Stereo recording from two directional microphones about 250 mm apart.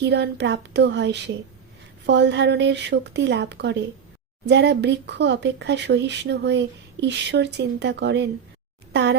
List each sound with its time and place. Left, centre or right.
0.0 s speech: right